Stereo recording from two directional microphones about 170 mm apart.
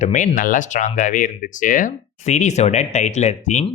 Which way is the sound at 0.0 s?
40° left (ahead or behind).